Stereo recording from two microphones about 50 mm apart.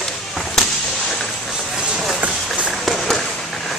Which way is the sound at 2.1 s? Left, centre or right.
Right.